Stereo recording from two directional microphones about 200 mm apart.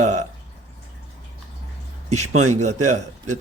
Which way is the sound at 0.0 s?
35° right (ahead or behind).